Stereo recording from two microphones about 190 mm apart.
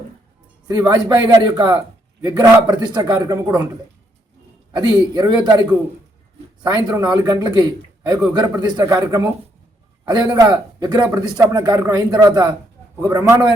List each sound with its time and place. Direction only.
0.7 s a man's voice: 15° right (ahead or behind)
4.8 s a man's voice: 20° right (ahead or behind)